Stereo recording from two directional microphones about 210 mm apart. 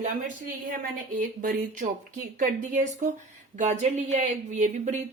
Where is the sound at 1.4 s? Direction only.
40° right (ahead or behind).